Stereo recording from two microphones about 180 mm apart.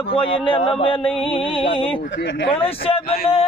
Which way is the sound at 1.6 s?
30° left (ahead or behind).